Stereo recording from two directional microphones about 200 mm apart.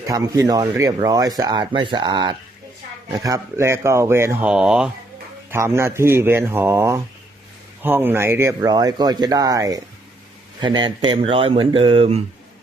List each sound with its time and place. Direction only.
0.1 s speech: 20° right (ahead or behind)